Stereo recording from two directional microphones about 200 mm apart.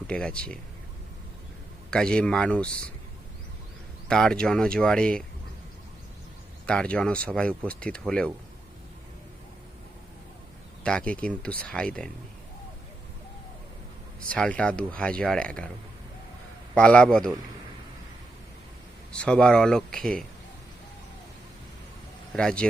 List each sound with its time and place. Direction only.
0.1 s speech: 5° left (ahead or behind)
1.9 s speech: 5° left (ahead or behind)
4.1 s speech: 5° left (ahead or behind)
6.7 s speech: 5° left (ahead or behind)
10.8 s speech: 5° left (ahead or behind)
14.2 s speech: 5° left (ahead or behind)
16.7 s speech: 5° left (ahead or behind)
19.1 s speech: 5° left (ahead or behind)
22.4 s speech: 5° left (ahead or behind)